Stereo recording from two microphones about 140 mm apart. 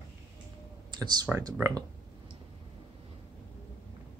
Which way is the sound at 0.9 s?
30° right (ahead or behind).